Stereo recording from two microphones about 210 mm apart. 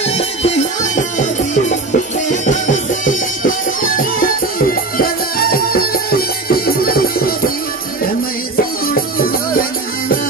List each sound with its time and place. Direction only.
0.0 s music: 30° left (ahead or behind); by 7.5 s 45° left (ahead or behind)
8.8 s music: 45° left (ahead or behind)